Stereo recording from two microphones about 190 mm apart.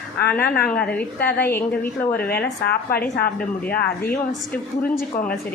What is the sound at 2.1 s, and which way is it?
Speech, 55° left (ahead or behind).